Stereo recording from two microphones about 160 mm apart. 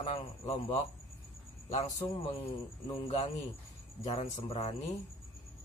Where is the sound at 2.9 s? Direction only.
35° left (ahead or behind).